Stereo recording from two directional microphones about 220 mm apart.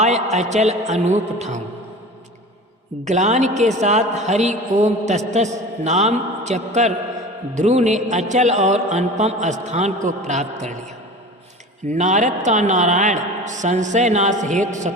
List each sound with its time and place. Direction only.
0.0 s a man's voice: 30° right (ahead or behind)
3.0 s a man's voice: 30° right (ahead or behind)
11.9 s a man's voice: 35° right (ahead or behind)